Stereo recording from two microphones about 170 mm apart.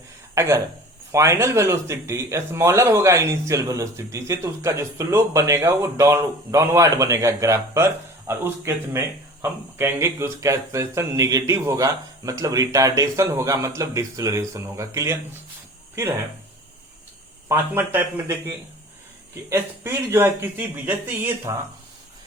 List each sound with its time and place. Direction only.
0.3 s speech: 15° right (ahead or behind)
17.5 s speech: 15° right (ahead or behind)